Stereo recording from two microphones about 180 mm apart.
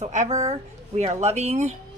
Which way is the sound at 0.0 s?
40° right (ahead or behind).